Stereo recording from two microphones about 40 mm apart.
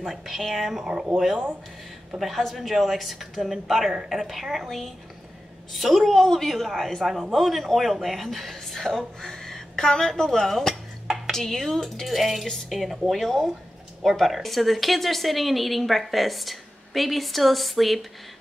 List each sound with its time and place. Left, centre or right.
0.3 s speech: centre
0.8 s speech: centre
2.1 s a woman's voice: centre
10.7 s dishes: centre
11.3 s speech: centre